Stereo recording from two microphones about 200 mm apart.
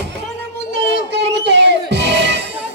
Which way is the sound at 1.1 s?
60° right (ahead or behind).